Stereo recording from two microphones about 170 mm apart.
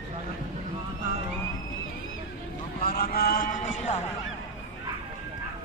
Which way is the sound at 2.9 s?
60° left (ahead or behind).